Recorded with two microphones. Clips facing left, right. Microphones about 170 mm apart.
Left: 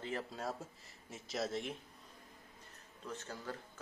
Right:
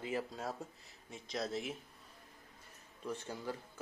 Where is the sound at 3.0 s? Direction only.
10° right (ahead or behind).